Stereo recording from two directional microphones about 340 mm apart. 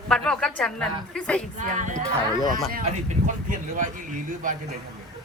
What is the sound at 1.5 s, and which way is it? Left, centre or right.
Speech, right.